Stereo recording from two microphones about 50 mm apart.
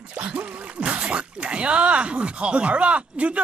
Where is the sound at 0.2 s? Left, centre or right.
Right.